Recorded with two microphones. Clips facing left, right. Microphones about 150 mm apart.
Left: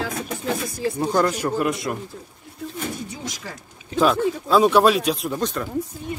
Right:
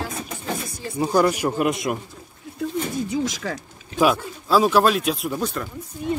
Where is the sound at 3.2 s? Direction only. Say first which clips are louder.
Right 7 dB; 90° right.